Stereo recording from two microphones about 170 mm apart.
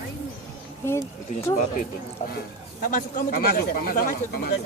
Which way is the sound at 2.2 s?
45° left (ahead or behind).